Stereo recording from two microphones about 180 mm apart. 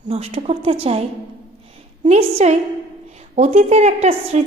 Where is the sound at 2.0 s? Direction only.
35° right (ahead or behind).